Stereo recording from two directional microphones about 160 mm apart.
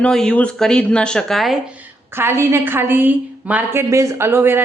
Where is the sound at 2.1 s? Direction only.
15° right (ahead or behind).